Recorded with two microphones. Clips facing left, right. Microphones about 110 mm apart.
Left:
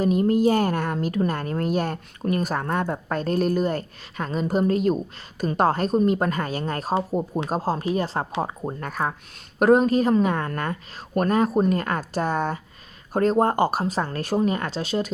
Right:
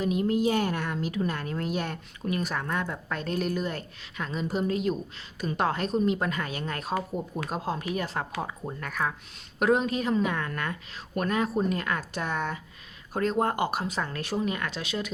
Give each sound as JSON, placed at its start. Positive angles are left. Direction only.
{"t": 0.0, "sound": "a woman's voice", "side_deg": 45}